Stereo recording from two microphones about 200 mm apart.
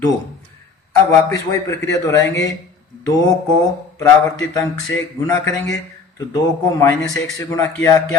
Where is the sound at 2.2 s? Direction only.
60° left (ahead or behind).